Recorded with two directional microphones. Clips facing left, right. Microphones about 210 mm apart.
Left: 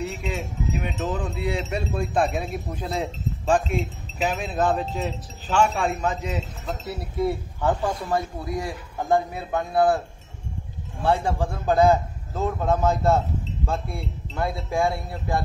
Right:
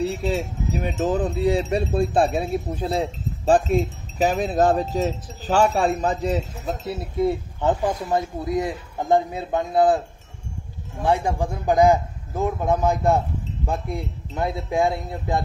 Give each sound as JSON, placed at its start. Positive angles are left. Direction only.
{"t": 0.0, "sound": "speech", "side_deg": -35}
{"t": 0.9, "sound": "wind chime", "side_deg": -35}
{"t": 6.9, "sound": "a man's voice", "side_deg": -20}